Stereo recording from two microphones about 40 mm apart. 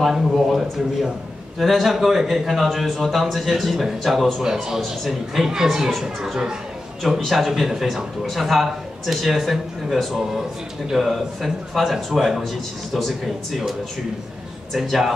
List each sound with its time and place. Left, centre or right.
0.1 s a man's voice: centre
5.9 s a man's voice: centre